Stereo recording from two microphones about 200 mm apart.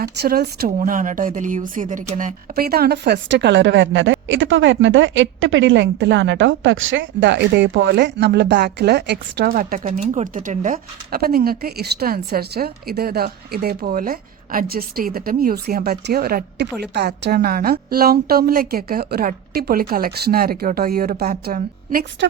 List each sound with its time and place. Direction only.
0.0 s speech: 50° right (ahead or behind)